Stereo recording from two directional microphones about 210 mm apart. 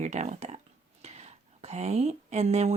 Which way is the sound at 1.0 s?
30° right (ahead or behind).